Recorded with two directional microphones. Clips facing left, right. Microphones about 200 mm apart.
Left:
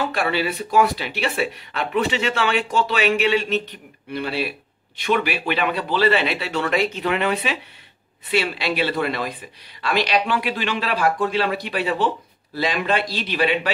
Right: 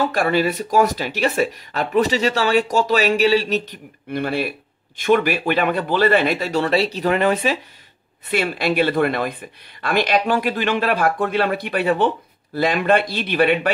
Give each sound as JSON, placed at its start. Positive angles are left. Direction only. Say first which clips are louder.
{"t": 0.1, "sound": "speech", "louder": "right 4 dB", "side_deg": -45}